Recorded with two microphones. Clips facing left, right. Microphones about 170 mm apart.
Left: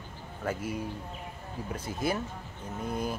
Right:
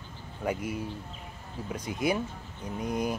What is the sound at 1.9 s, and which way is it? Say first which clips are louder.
Speech: right 3 dB; 35° left (ahead or behind).